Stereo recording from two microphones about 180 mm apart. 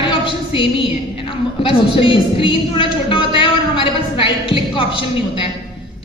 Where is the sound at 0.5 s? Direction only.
30° left (ahead or behind).